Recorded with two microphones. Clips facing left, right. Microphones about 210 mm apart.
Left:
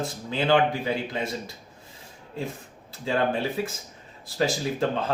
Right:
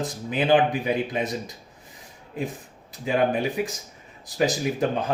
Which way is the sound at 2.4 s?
15° right (ahead or behind).